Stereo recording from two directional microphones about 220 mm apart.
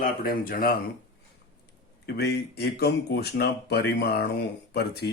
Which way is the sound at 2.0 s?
45° left (ahead or behind).